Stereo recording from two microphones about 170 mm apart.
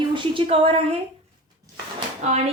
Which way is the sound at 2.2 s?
45° right (ahead or behind).